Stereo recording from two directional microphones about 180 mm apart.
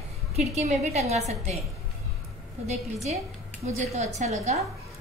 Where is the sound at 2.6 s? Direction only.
35° right (ahead or behind).